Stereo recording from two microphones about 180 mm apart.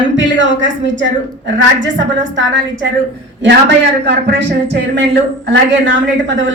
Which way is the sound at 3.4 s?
70° right (ahead or behind).